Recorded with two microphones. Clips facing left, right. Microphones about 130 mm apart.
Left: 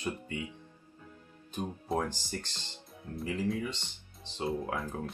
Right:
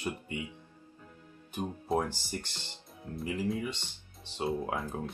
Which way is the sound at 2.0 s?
15° right (ahead or behind).